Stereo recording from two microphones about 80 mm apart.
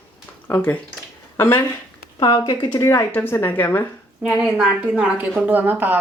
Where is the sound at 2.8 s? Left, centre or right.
Left.